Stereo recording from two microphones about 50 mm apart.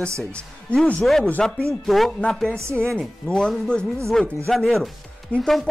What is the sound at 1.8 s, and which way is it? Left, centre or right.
Speech, centre.